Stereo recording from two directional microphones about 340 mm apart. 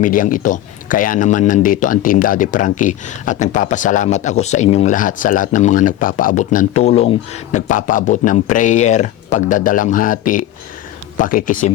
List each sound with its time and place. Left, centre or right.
0.0 s speech: left